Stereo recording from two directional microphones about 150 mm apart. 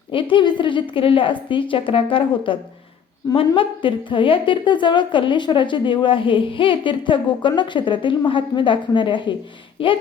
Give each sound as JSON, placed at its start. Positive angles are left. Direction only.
{"t": 0.1, "sound": "a woman's voice", "side_deg": 35}